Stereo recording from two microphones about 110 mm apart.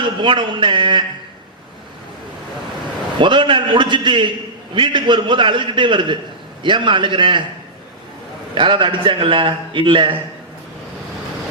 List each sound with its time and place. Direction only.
0.0 s a man's voice: 45° right (ahead or behind)
3.2 s a man's voice: 50° right (ahead or behind)
8.5 s a man's voice: 50° right (ahead or behind)